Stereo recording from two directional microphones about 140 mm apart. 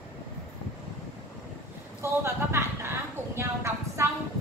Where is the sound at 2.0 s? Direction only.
20° right (ahead or behind).